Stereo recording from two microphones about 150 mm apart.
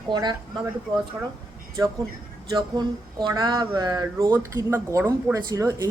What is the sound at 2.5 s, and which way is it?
Speech, 30° right (ahead or behind).